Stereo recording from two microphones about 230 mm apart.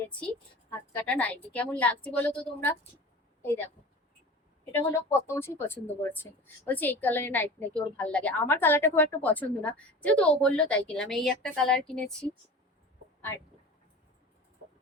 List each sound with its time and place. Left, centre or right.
0.7 s a woman's voice: centre
4.7 s a woman's voice: centre